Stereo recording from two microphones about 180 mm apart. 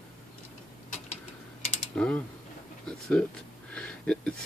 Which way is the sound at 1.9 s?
5° left (ahead or behind).